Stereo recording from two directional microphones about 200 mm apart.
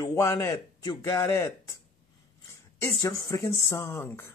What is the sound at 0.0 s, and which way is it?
Speech, 15° left (ahead or behind).